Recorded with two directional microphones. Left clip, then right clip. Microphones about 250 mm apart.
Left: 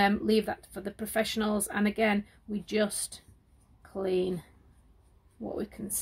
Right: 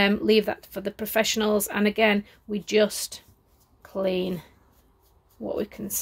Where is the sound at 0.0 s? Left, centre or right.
Right.